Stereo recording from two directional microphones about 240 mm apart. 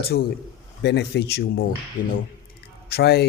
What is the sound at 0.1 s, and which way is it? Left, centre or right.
Speech, left.